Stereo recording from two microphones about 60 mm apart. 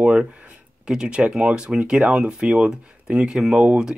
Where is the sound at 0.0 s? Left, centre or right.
Centre.